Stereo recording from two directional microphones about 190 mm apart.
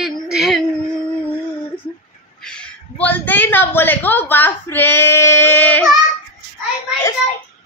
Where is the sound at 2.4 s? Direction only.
5° left (ahead or behind).